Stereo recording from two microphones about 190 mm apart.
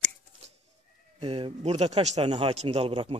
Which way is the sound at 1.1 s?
30° right (ahead or behind).